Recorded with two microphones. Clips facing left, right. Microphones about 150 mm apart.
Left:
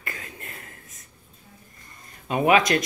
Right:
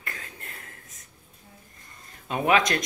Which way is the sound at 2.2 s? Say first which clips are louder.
Left 3 dB; 5° left (ahead or behind).